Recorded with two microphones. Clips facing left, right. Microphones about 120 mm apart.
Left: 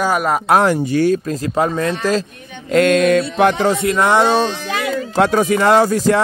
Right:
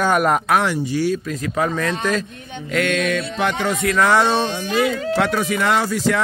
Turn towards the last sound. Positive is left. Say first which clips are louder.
# left 6 dB
turn(degrees=45)  # may be behind; listen again after turning